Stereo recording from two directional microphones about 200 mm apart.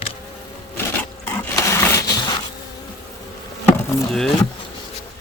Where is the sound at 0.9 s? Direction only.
10° left (ahead or behind).